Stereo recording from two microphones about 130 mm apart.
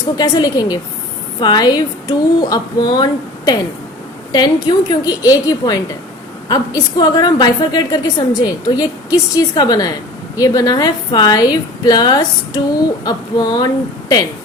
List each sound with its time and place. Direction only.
0.2 s a woman's voice: 30° left (ahead or behind)